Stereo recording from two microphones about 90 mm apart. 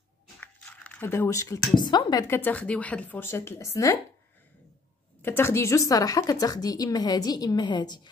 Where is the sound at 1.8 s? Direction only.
55° left (ahead or behind).